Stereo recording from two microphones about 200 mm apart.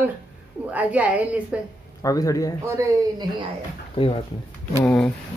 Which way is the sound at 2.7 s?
15° right (ahead or behind).